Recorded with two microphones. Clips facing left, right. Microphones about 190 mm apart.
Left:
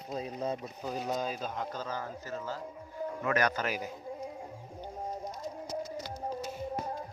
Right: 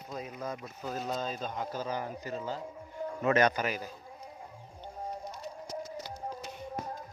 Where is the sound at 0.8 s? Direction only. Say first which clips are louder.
Even; 15° left (ahead or behind).